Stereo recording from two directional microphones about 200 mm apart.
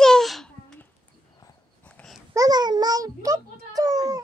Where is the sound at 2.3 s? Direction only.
20° right (ahead or behind).